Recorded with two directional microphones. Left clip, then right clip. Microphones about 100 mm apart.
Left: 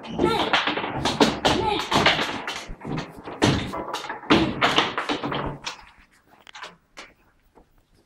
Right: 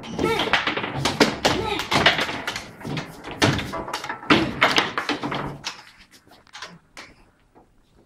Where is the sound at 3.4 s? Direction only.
20° right (ahead or behind).